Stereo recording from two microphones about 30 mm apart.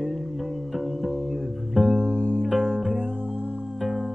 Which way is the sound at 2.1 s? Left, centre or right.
Left.